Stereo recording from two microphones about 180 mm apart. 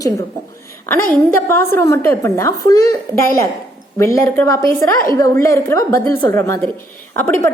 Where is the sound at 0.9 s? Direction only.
10° left (ahead or behind).